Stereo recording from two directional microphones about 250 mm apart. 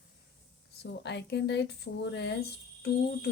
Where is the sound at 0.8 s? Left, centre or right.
Left.